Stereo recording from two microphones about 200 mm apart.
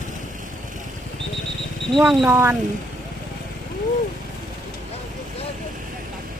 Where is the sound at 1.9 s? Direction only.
5° right (ahead or behind).